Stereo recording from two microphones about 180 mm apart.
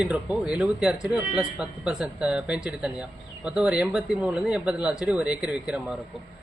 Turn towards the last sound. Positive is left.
turn(degrees=-5)  # may be behind; listen again after turning